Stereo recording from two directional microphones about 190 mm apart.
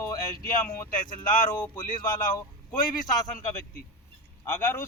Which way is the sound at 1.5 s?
10° left (ahead or behind).